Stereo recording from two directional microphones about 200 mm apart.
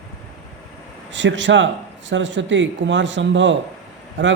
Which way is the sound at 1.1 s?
65° right (ahead or behind).